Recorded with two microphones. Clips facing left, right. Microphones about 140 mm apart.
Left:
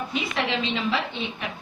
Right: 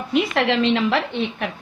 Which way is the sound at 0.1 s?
70° right (ahead or behind).